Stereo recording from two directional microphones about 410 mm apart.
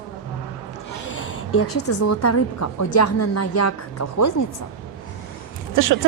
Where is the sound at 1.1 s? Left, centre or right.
Left.